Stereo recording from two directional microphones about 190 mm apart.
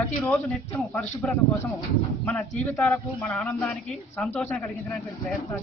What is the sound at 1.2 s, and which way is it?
Speech, 5° left (ahead or behind).